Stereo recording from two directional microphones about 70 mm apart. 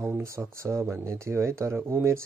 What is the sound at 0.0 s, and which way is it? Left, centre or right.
Speech, right.